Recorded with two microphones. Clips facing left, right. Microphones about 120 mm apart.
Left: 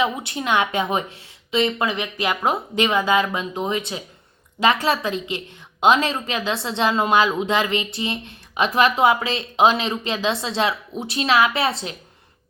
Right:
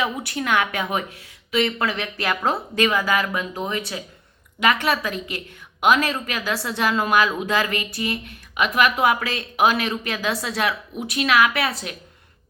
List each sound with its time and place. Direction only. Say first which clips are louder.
0.0 s a woman's voice: left 2 dB; 20° left (ahead or behind)